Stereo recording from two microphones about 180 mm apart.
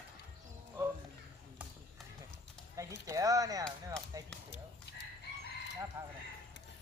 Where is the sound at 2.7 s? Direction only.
20° right (ahead or behind).